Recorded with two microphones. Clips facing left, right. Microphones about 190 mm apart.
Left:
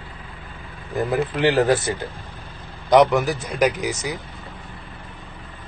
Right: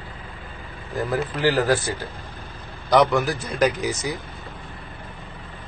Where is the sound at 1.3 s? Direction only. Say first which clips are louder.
Left 2 dB; 25° left (ahead or behind).